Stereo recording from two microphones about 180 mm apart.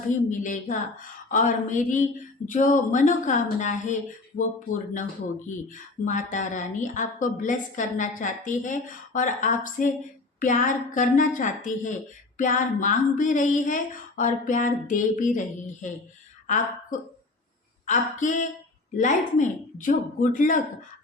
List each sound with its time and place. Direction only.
0.3 s a woman's voice: 45° left (ahead or behind)
5.5 s a woman's voice: 45° left (ahead or behind)
17.8 s a woman's voice: 45° left (ahead or behind)